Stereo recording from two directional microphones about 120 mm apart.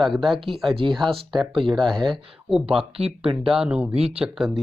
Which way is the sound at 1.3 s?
45° right (ahead or behind).